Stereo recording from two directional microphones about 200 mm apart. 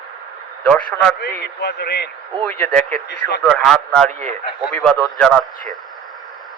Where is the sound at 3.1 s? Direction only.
55° left (ahead or behind).